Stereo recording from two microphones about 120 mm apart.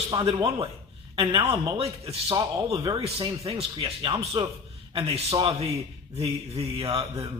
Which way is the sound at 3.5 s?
50° right (ahead or behind).